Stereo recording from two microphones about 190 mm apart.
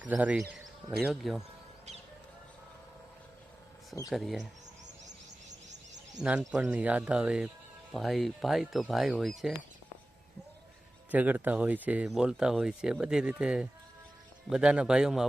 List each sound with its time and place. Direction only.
0.0 s a man's voice: 5° right (ahead or behind)
4.1 s speech: centre (ahead or behind)
5.0 s bird: 40° right (ahead or behind)
6.5 s speech: 5° right (ahead or behind)
11.1 s speech: 10° right (ahead or behind)